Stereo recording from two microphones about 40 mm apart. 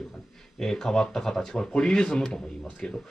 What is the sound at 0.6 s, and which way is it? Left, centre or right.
Speech, centre.